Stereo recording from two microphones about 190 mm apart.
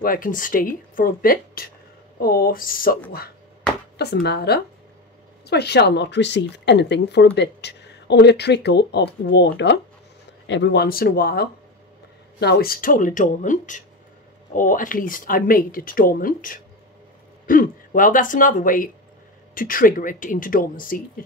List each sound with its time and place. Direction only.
0.0 s a woman's voice: 45° left (ahead or behind)
4.0 s a woman's voice: 60° left (ahead or behind)